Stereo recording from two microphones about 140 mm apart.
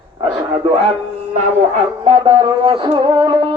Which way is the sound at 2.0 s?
35° right (ahead or behind).